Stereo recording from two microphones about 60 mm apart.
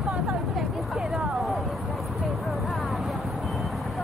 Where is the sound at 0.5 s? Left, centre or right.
Centre.